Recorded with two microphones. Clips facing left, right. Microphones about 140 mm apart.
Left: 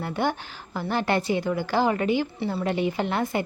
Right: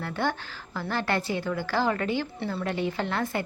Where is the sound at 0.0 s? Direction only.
15° left (ahead or behind).